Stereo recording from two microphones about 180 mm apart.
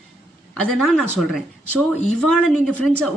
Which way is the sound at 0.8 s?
5° left (ahead or behind).